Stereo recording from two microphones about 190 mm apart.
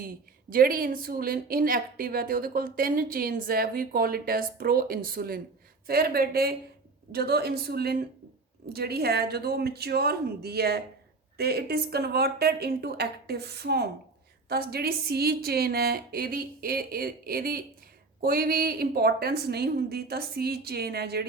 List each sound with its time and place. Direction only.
0.5 s a woman's voice: 50° right (ahead or behind)